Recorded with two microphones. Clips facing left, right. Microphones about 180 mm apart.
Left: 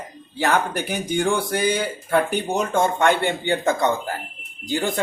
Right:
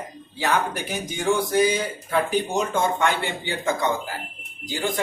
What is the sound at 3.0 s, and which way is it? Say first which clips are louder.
Speech: left 5 dB; 55° left (ahead or behind).